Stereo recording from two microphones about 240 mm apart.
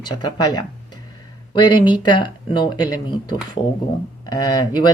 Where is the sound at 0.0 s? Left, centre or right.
Centre.